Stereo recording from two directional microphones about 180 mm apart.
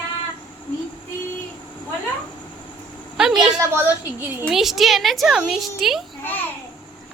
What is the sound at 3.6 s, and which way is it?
A woman's voice, 10° right (ahead or behind).